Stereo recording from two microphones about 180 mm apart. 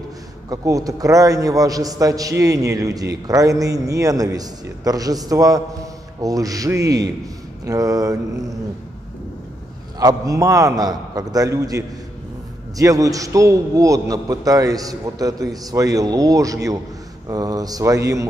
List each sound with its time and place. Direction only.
0.5 s a man's voice: 20° right (ahead or behind)
9.9 s a man's voice: 20° right (ahead or behind)